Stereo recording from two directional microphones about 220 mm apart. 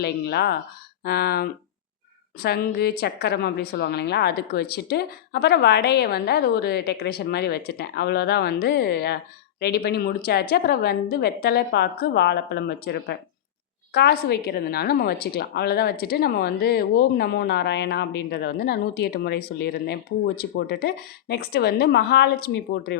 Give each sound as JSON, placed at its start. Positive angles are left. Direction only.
{"t": 0.0, "sound": "a woman's voice", "side_deg": 45}